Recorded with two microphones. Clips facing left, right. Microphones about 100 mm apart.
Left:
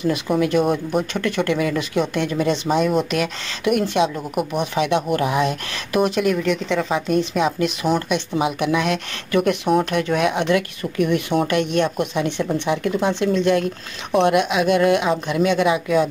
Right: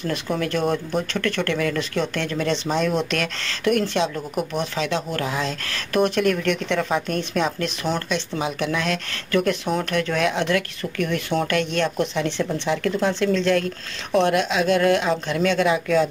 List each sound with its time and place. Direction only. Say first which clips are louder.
0.0 s speech: left 5 dB; 10° left (ahead or behind)
5.9 s speech: left 1 dB; 5° left (ahead or behind)